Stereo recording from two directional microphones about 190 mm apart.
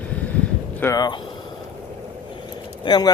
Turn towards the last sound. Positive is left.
turn(degrees=20)  # may be behind; listen again after turning